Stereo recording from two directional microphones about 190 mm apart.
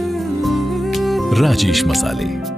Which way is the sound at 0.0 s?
Centre (ahead or behind).